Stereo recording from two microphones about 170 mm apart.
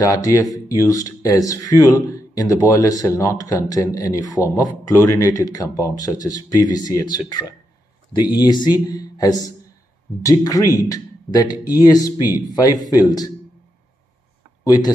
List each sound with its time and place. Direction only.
0.0 s speech: 20° left (ahead or behind)
14.6 s speech: 20° left (ahead or behind)